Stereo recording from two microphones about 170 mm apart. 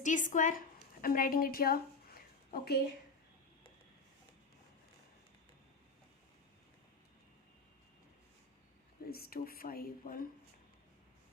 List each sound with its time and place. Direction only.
0.0 s a woman's voice: 45° left (ahead or behind); by 2.8 s 65° left (ahead or behind)
9.0 s speech: 65° left (ahead or behind)